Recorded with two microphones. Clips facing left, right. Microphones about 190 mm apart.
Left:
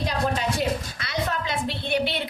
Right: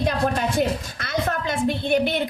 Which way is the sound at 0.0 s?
50° right (ahead or behind).